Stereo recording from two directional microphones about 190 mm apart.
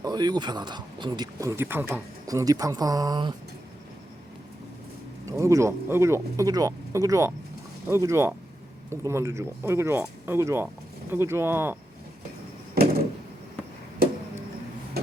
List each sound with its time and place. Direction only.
0.0 s speech: 20° right (ahead or behind)
5.3 s speech: 15° right (ahead or behind)
12.8 s door: 55° right (ahead or behind)